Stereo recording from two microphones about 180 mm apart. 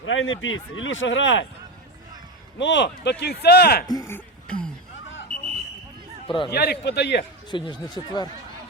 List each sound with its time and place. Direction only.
0.0 s speech: 90° left
2.6 s speech: 80° left; by 3.8 s 60° left (ahead or behind)
3.8 s speech: 20° left (ahead or behind)
4.4 s a sound: 5° left (ahead or behind)
6.2 s speech: 25° left (ahead or behind)
6.5 s speech: 65° left (ahead or behind)
7.5 s speech: 25° left (ahead or behind)